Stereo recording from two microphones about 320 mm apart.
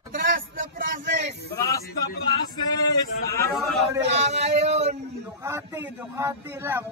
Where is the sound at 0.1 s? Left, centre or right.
Right.